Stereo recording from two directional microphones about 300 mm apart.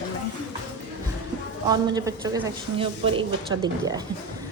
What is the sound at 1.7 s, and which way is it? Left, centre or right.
A child's voice, centre.